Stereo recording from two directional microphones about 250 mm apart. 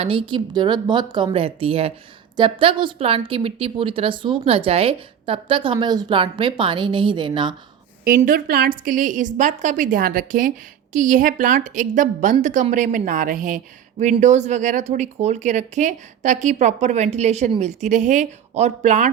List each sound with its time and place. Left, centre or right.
0.0 s a woman's voice: right
8.0 s a woman's voice: right